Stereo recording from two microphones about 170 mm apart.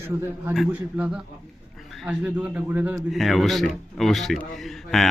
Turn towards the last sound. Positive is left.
turn(degrees=0)  # may be behind; listen again after turning